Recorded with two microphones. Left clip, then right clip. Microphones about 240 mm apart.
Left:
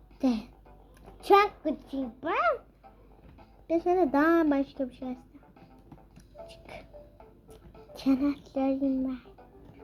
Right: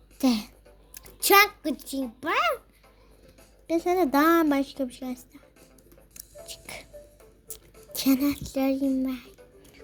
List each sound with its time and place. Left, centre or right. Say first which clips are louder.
0.2 s a sound: right 4 dB; right
0.9 s a child's voice: right 3 dB; right
3.7 s a woman's voice: right 2 dB; right
6.5 s music: right 9 dB; right
7.4 s a child's voice: right 5 dB; right